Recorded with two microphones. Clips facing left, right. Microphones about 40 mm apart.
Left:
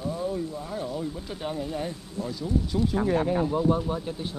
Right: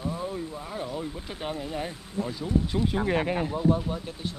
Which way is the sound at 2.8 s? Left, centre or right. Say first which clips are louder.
Left 1 dB; right.